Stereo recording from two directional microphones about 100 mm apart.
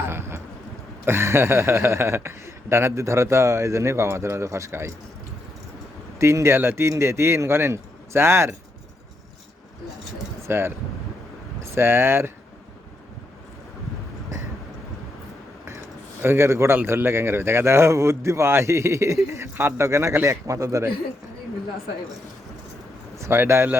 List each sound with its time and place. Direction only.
0.1 s a sound: 25° right (ahead or behind)
1.0 s a man's voice: 25° right (ahead or behind)
6.1 s a man's voice: 30° right (ahead or behind)
10.5 s a man's voice: 25° right (ahead or behind)
16.2 s a man's voice: 25° right (ahead or behind)
23.1 s speech: 25° right (ahead or behind)